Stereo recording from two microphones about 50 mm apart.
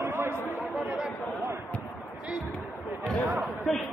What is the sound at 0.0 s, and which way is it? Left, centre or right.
Chatter, right.